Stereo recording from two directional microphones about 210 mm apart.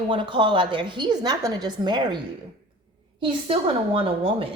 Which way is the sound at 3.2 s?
25° right (ahead or behind).